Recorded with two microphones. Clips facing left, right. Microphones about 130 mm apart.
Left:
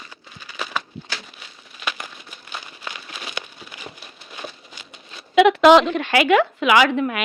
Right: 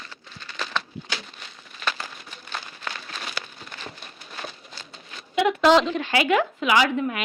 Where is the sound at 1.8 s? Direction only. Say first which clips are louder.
Even; 10° left (ahead or behind).